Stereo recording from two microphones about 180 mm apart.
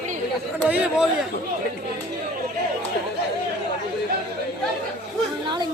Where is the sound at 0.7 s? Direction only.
5° right (ahead or behind).